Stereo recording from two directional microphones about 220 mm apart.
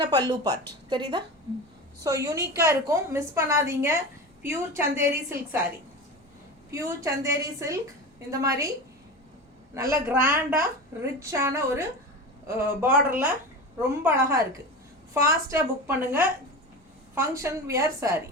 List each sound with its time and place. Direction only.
0.0 s a woman's voice: 20° right (ahead or behind)
6.7 s a woman's voice: 15° right (ahead or behind)
9.7 s a woman's voice: 15° right (ahead or behind)